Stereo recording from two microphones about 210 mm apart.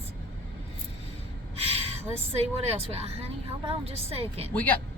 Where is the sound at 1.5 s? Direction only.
30° right (ahead or behind).